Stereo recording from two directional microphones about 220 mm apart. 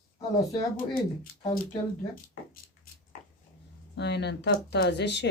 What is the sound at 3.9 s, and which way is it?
Speech, 50° left (ahead or behind).